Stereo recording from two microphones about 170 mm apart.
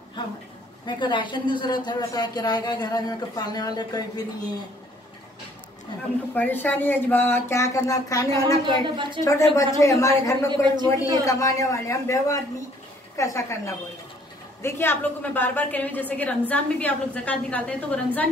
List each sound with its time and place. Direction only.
0.8 s speech: 25° left (ahead or behind)
6.3 s a woman's voice: 10° left (ahead or behind)
8.6 s a man's voice: 30° right (ahead or behind)
9.2 s speech: 20° left (ahead or behind)
10.5 s a man's voice: 25° right (ahead or behind)
11.2 s a woman's voice: 20° left (ahead or behind)
14.6 s a woman's voice: 15° left (ahead or behind)